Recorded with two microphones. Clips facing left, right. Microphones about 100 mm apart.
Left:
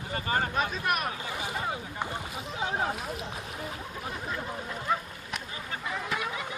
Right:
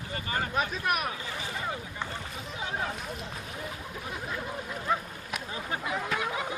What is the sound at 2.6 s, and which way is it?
Speech, 30° left (ahead or behind).